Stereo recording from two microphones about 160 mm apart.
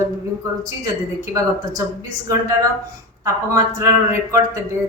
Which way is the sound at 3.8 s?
15° right (ahead or behind).